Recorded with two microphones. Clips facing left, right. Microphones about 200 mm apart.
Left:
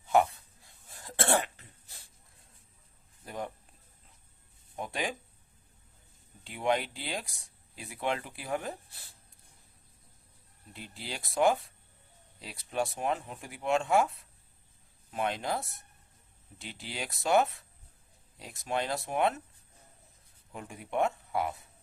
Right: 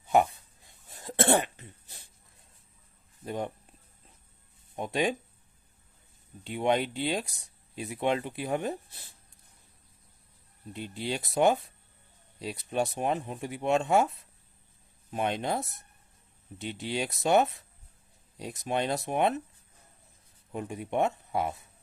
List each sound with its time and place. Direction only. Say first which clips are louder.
0.1 s cough: right 1 dB; 20° right (ahead or behind)
3.2 s speech: right 5 dB; 25° right (ahead or behind)
4.8 s speech: right 6 dB; 20° right (ahead or behind)
6.4 s speech: right 3 dB; 25° right (ahead or behind)
10.7 s speech: right 9 dB; 20° right (ahead or behind)
15.1 s speech: right 3 dB; 25° right (ahead or behind)
20.5 s speech: right 4 dB; 25° right (ahead or behind)